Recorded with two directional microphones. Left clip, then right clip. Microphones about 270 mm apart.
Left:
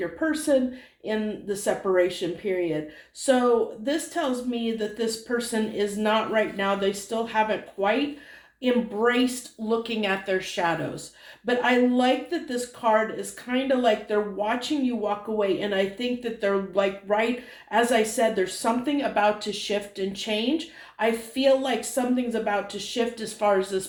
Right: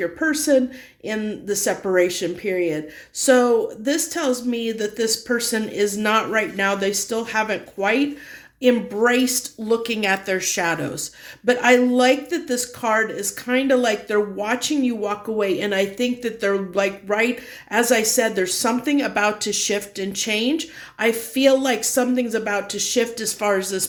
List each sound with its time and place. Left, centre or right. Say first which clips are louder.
0.0 s speech: right 5 dB; right
3.8 s speech: right 5 dB; right